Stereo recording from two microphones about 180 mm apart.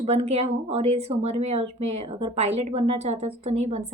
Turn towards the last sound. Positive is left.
turn(degrees=-35)  # may be behind; listen again after turning